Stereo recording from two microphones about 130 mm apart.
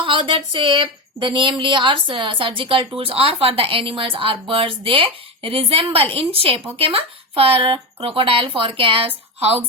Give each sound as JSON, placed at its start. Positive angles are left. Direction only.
{"t": 0.0, "sound": "speech", "side_deg": -40}